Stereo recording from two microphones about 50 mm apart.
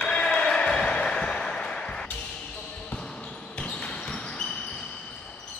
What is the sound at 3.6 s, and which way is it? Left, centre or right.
Basketball bounce, left.